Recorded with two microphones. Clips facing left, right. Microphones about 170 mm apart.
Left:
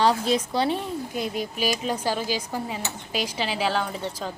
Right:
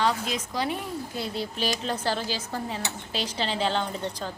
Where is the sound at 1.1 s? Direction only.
15° left (ahead or behind).